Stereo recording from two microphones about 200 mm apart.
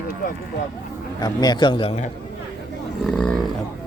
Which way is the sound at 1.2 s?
20° left (ahead or behind).